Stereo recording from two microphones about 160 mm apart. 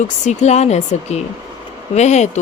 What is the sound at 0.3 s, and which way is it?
Speech, 45° left (ahead or behind).